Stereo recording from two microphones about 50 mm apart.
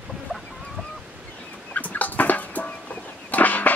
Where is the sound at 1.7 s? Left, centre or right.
Left.